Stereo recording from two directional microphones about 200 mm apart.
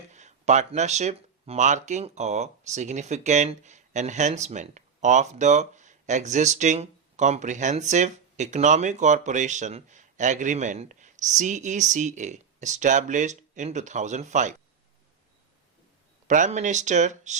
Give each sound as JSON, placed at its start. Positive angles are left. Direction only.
{"t": 0.1, "sound": "speech", "side_deg": -35}
{"t": 16.2, "sound": "speech", "side_deg": -40}